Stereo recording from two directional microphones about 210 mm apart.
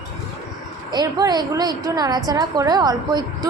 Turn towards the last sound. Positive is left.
turn(degrees=-20)  # may be behind; listen again after turning